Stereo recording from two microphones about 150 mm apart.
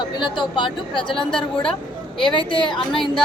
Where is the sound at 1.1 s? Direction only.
5° left (ahead or behind).